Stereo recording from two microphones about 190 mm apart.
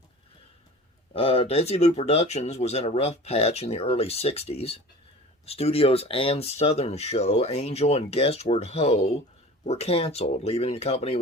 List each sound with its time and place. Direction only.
1.1 s speech: 30° left (ahead or behind)